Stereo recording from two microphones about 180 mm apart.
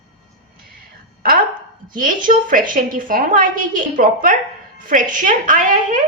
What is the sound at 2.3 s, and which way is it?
A woman's voice, 50° right (ahead or behind).